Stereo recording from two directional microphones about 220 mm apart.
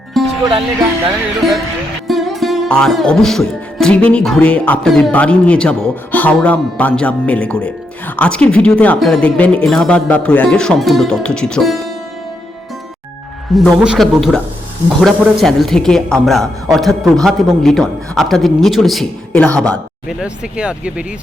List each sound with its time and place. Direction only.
0.1 s music: centre (ahead or behind)
1.4 s music: centre (ahead or behind)
13.5 s music: centre (ahead or behind)